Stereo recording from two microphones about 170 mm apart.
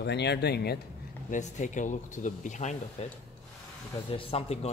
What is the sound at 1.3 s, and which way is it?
Speech, 45° left (ahead or behind).